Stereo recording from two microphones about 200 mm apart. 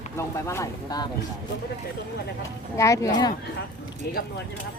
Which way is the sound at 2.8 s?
15° left (ahead or behind).